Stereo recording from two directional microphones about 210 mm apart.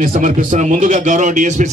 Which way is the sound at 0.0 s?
40° right (ahead or behind).